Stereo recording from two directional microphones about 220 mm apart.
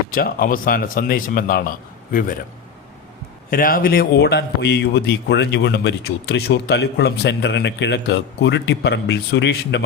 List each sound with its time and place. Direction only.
0.1 s speech: 40° left (ahead or behind)
3.5 s speech: 40° left (ahead or behind)